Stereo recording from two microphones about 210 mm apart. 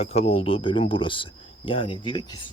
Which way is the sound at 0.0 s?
30° left (ahead or behind).